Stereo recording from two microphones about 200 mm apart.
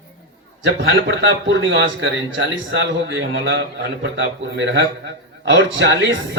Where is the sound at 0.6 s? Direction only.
65° right (ahead or behind).